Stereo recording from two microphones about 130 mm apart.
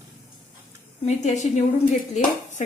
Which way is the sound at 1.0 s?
65° left (ahead or behind).